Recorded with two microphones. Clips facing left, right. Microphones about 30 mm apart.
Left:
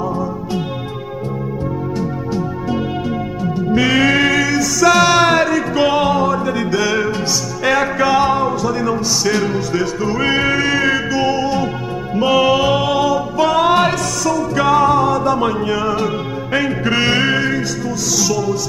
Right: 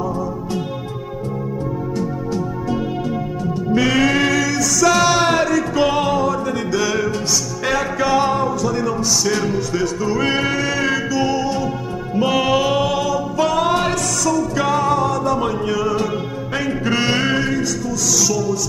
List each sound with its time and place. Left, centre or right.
2.0 s music: centre
12.2 s music: centre